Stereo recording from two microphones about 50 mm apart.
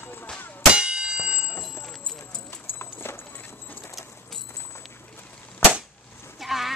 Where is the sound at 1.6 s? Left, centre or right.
Centre.